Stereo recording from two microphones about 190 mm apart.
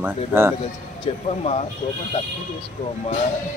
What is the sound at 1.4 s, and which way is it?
Speech, 35° left (ahead or behind).